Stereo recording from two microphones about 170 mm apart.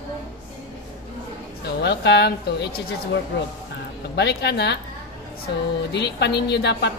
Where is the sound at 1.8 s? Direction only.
75° left (ahead or behind).